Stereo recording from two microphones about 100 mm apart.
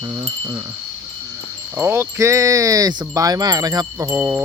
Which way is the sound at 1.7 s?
25° right (ahead or behind).